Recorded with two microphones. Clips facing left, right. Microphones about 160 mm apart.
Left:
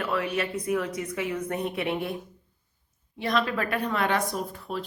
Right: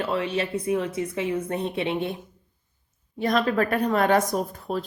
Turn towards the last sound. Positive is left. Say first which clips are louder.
# right 4 dB
turn(degrees=-45)  # may be behind; listen again after turning